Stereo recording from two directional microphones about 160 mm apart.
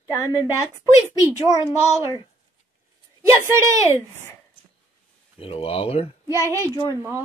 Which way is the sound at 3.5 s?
20° right (ahead or behind).